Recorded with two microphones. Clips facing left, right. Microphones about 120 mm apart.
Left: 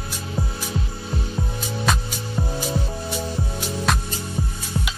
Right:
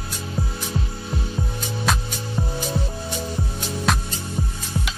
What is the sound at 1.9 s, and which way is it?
Music, centre (ahead or behind).